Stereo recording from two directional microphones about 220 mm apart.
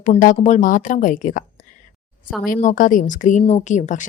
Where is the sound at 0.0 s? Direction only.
35° left (ahead or behind).